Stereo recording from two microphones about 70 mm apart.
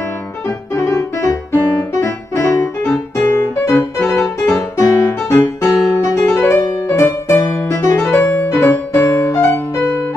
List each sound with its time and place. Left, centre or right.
0.9 s music: left
1.5 s music: left
2.8 s music: left
6.1 s music: left
8.1 s music: left